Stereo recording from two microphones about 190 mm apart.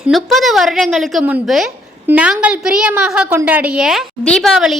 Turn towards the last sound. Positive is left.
turn(degrees=0)  # may be behind; listen again after turning